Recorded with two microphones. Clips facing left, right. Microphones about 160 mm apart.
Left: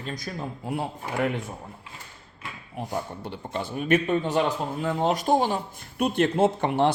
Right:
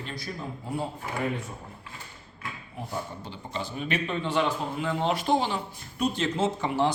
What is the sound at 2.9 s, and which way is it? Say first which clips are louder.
A man's voice: left 3 dB; 60° left (ahead or behind).